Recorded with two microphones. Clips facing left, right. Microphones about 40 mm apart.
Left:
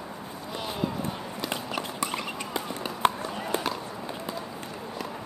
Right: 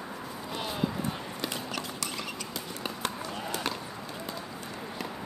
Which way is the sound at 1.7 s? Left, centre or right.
Left.